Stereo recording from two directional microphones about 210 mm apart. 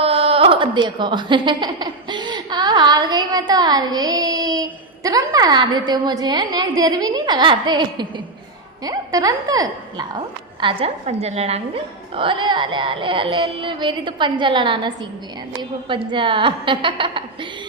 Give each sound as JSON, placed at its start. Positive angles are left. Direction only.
{"t": 0.0, "sound": "a woman's voice", "side_deg": -25}